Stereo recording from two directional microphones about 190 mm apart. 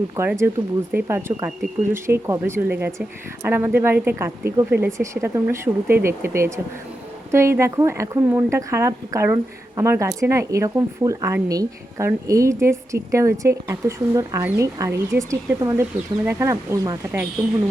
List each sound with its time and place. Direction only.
0.2 s speech: 10° right (ahead or behind)